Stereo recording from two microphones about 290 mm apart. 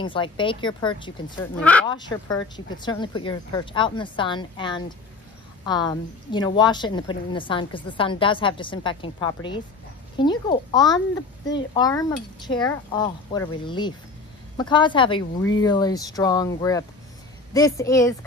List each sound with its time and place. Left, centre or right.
0.0 s a woman's voice: centre
1.6 s a woman's voice: centre